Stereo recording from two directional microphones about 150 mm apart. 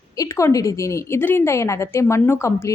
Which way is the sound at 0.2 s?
20° left (ahead or behind).